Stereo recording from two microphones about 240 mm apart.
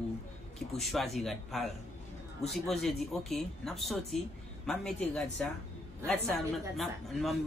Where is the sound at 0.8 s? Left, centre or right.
Centre.